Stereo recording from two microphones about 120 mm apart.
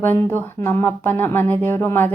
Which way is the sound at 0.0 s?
15° left (ahead or behind).